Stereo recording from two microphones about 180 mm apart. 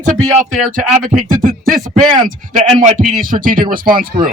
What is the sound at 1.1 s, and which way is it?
A man's voice, 50° right (ahead or behind).